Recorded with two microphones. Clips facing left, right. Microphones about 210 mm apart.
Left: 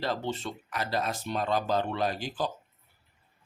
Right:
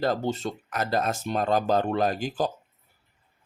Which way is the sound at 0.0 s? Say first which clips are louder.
Right 6 dB; 45° right (ahead or behind).